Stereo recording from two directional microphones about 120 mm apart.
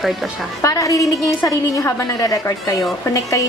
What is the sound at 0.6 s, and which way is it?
A woman's voice, 30° left (ahead or behind).